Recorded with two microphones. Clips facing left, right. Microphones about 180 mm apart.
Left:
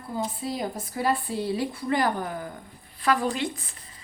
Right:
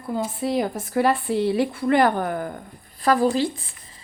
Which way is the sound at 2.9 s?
40° right (ahead or behind).